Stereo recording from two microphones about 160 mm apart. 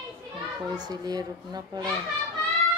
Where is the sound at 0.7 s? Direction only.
25° right (ahead or behind).